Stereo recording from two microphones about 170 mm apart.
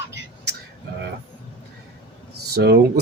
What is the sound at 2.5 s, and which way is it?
Speech, 70° right (ahead or behind).